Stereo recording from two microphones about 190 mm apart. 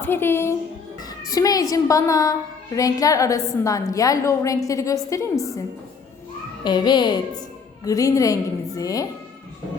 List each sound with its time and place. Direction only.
0.0 s a woman's voice: 10° left (ahead or behind)
6.7 s a child's voice: 25° left (ahead or behind)